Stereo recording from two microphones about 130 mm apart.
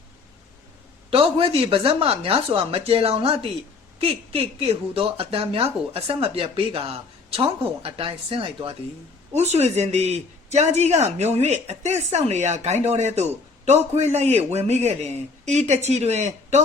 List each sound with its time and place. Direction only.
1.1 s speech: 45° right (ahead or behind)
9.3 s speech: 55° right (ahead or behind)